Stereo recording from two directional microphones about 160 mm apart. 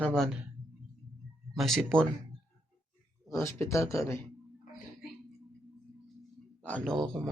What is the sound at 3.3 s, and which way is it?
Speech, 15° left (ahead or behind).